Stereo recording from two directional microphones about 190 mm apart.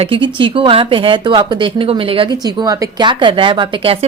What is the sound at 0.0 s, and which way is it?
A woman's voice, 30° right (ahead or behind).